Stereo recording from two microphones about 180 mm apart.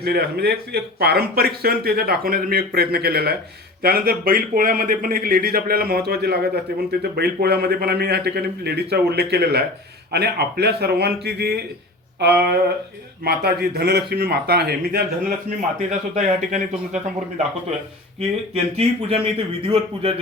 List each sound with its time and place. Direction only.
0.0 s a man's voice: 60° right (ahead or behind)
15.9 s speech: 45° right (ahead or behind)
18.2 s a man's voice: 35° right (ahead or behind)